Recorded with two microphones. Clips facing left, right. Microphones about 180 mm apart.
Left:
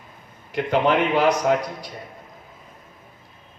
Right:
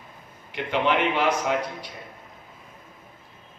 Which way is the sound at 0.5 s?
40° left (ahead or behind).